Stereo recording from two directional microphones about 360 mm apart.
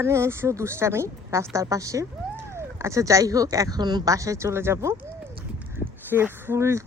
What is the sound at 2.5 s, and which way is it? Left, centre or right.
Speech, centre.